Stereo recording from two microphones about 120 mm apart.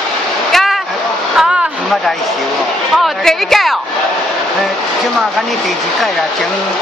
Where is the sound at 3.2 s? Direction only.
Centre (ahead or behind).